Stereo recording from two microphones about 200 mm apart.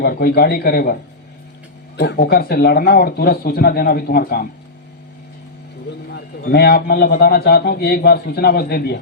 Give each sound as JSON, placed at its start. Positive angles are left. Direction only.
{"t": 0.0, "sound": "a man's voice", "side_deg": 50}
{"t": 2.0, "sound": "a man's voice", "side_deg": 55}
{"t": 6.1, "sound": "a man's voice", "side_deg": 55}